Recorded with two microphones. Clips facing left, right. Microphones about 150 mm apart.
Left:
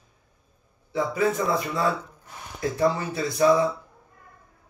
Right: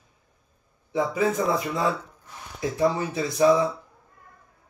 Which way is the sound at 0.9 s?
20° right (ahead or behind).